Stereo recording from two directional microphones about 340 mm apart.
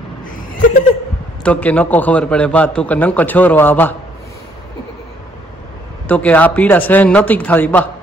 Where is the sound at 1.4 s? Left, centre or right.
Centre.